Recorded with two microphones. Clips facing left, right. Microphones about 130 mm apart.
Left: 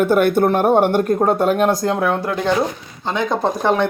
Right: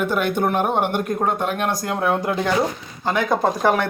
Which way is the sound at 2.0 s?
15° right (ahead or behind).